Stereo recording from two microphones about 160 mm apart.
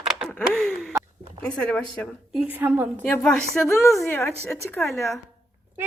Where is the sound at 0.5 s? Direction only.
Centre (ahead or behind).